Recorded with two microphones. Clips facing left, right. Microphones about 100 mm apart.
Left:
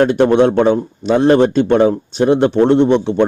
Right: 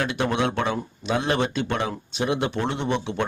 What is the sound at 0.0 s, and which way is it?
A man's voice, 45° left (ahead or behind).